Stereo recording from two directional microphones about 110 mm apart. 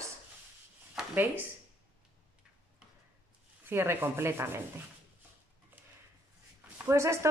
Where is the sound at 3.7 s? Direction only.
20° right (ahead or behind).